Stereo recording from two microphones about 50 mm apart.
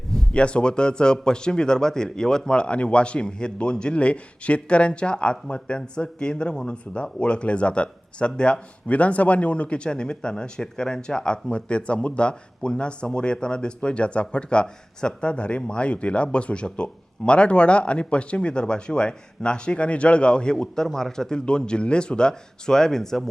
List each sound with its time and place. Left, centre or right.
0.3 s speech: left